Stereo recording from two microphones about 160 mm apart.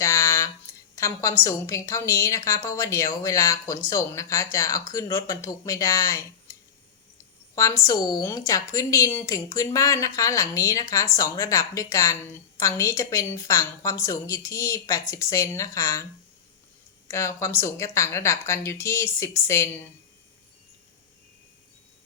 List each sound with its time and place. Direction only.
0.0 s a sound: 20° left (ahead or behind)
0.9 s a woman's voice: 20° left (ahead or behind)
7.5 s a woman's voice: 20° left (ahead or behind)
17.1 s a woman's voice: 20° left (ahead or behind)